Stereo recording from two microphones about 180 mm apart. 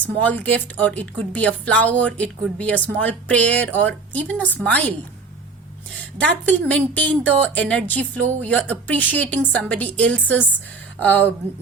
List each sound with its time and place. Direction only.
0.0 s speech: 10° left (ahead or behind)
6.1 s speech: 10° left (ahead or behind)